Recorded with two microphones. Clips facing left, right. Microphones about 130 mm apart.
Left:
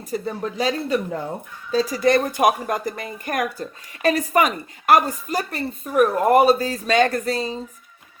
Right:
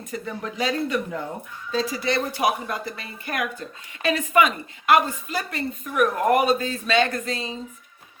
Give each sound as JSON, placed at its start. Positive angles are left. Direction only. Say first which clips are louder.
{"t": 0.1, "sound": "speech", "louder": "left 5 dB", "side_deg": 35}